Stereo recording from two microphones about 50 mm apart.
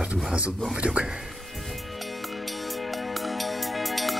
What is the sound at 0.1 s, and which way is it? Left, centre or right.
Speech, right.